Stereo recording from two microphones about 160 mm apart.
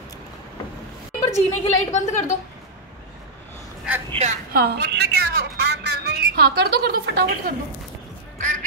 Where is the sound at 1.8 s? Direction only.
45° left (ahead or behind).